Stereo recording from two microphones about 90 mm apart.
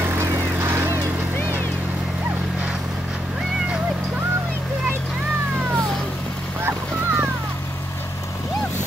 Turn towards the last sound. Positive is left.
turn(degrees=-20)  # may be behind; listen again after turning